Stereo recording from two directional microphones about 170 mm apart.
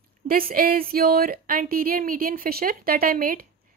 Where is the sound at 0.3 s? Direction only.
60° right (ahead or behind).